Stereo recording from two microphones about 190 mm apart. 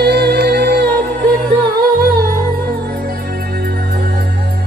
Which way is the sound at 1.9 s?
45° right (ahead or behind).